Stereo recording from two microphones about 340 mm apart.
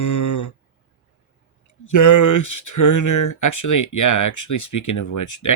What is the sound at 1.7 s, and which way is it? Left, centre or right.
Speech, left.